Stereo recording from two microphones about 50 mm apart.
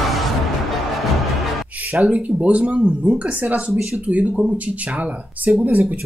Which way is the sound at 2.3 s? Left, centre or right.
Right.